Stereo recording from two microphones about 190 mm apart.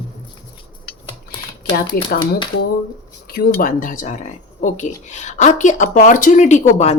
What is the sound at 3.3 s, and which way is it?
Speech, 55° left (ahead or behind).